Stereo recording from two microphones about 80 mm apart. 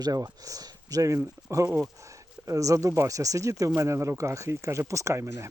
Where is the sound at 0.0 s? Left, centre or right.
Right.